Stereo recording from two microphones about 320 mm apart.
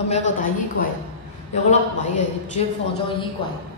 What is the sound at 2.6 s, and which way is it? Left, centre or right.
Speech, centre.